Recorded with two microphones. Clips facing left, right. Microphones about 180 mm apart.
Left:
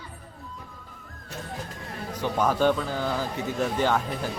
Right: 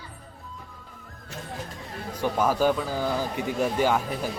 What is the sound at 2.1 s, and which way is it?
Speech, 10° right (ahead or behind).